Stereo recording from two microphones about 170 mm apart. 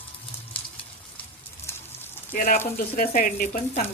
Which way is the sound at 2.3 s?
50° left (ahead or behind).